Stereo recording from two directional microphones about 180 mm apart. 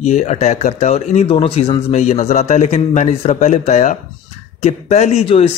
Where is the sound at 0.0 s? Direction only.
40° left (ahead or behind).